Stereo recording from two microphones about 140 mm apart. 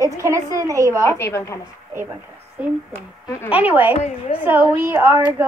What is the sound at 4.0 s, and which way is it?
Speech, 55° left (ahead or behind).